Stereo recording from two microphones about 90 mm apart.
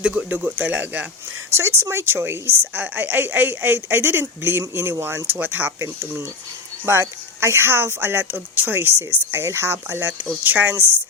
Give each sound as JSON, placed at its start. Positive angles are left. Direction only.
{"t": 0.0, "sound": "speech", "side_deg": -10}
{"t": 1.5, "sound": "a woman's voice", "side_deg": -30}